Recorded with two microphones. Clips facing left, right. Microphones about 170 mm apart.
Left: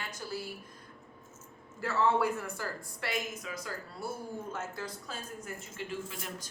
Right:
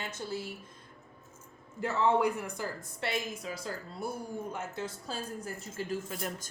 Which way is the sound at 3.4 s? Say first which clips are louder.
Right 2 dB; 30° right (ahead or behind).